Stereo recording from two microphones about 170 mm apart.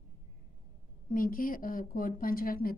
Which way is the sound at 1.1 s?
55° left (ahead or behind).